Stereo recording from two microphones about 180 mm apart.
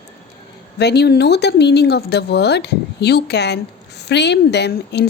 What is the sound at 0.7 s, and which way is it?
Speech, 65° left (ahead or behind).